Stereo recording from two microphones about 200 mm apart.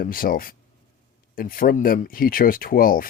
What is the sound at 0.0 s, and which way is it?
Speech, 45° left (ahead or behind).